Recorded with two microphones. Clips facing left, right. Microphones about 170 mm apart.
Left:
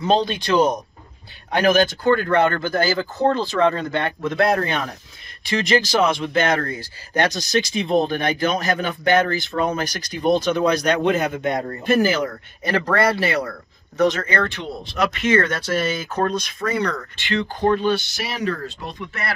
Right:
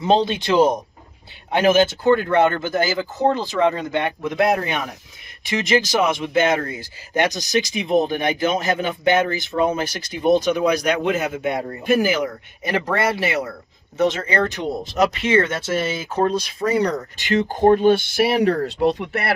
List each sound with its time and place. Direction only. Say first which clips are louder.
0.0 s speech: right 1 dB; 25° right (ahead or behind)
10.4 s speech: even; 10° right (ahead or behind)
14.5 s speech: right 5 dB; 45° right (ahead or behind); by 16.6 s 30° right (ahead or behind)
16.7 s speech: right 4 dB; 40° right (ahead or behind); by 19.3 s 65° right (ahead or behind)